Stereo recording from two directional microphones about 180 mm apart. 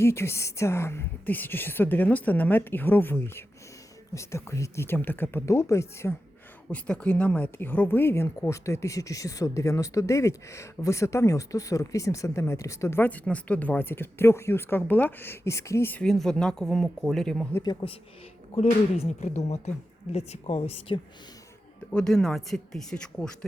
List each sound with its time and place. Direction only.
0.0 s speech: 15° left (ahead or behind)
17.5 s a man's voice: 25° left (ahead or behind)
18.5 s speech: 35° left (ahead or behind)
21.9 s speech: 5° left (ahead or behind)